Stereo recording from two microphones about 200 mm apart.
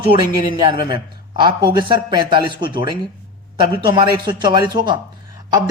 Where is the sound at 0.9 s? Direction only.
20° right (ahead or behind).